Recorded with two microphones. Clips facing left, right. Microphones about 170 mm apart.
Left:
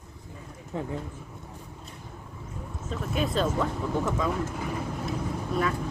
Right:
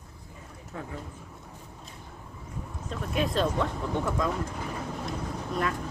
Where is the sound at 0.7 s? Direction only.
25° left (ahead or behind).